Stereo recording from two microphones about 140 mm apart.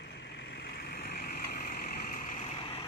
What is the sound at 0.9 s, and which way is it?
Vehicle, 90° left.